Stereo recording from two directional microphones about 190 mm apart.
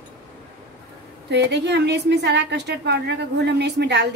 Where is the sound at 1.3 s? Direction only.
60° right (ahead or behind).